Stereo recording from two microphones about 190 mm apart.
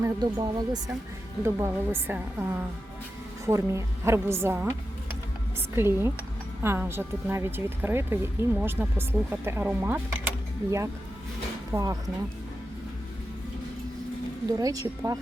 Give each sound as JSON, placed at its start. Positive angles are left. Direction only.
{"t": 0.0, "sound": "speech", "side_deg": -20}
{"t": 5.7, "sound": "speech", "side_deg": -10}
{"t": 11.7, "sound": "speech", "side_deg": -15}
{"t": 14.5, "sound": "speech", "side_deg": -20}